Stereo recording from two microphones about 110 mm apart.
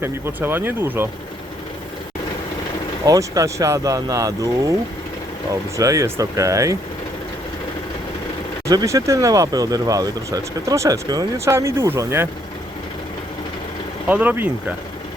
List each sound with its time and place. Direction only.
0.0 s speech: 20° right (ahead or behind)
3.1 s speech: 30° right (ahead or behind)
5.7 s speech: 30° right (ahead or behind)
8.6 s speech: 30° right (ahead or behind)
14.1 s speech: 15° right (ahead or behind)